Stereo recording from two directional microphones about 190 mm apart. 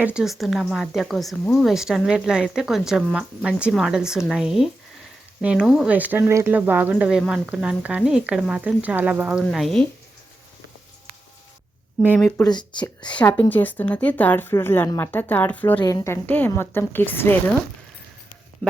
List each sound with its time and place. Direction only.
0.0 s speech: 5° right (ahead or behind)
12.0 s speech: 5° right (ahead or behind)
12.4 s speech: 20° left (ahead or behind)
13.1 s speech: 5° left (ahead or behind)
15.7 s speech: 20° left (ahead or behind)